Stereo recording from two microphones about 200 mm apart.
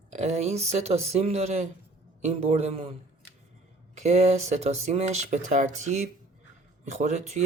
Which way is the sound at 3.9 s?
35° right (ahead or behind).